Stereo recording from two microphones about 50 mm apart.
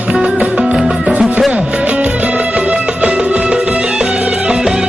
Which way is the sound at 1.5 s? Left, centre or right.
Right.